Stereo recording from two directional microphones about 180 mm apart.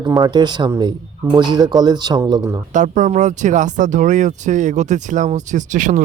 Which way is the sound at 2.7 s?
45° right (ahead or behind).